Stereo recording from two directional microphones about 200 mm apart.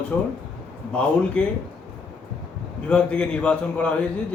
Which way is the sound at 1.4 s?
5° left (ahead or behind).